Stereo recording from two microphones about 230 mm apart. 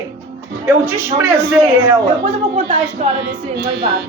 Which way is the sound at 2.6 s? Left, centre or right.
Right.